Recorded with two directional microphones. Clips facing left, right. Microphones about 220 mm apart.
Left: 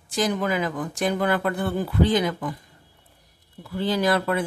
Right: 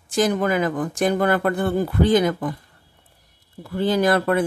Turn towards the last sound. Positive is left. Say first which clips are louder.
# right 4 dB
turn(degrees=-50)  # may be behind; listen again after turning